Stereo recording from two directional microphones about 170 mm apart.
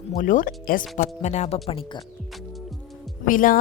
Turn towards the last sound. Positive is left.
turn(degrees=50)  # may be behind; listen again after turning